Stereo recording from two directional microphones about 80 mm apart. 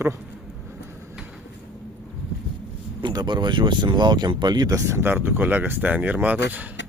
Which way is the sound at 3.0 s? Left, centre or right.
Right.